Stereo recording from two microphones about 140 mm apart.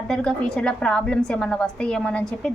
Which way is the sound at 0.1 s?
5° left (ahead or behind).